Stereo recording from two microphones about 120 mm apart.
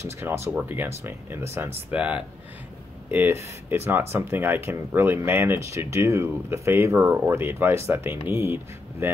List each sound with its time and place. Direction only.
0.0 s speech: 20° right (ahead or behind)